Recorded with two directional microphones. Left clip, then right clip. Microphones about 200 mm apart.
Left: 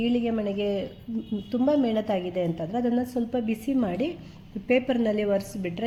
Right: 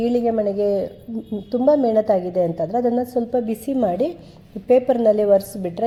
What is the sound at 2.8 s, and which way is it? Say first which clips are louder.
A woman's voice: right 7 dB; 10° right (ahead or behind).